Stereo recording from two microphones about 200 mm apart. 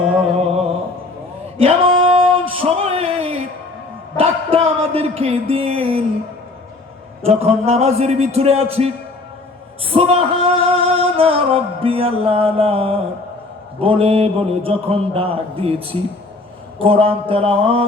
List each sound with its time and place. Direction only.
1.5 s a sound: 25° right (ahead or behind)
7.3 s a man's voice: 30° right (ahead or behind)
9.8 s male singing: 30° right (ahead or behind)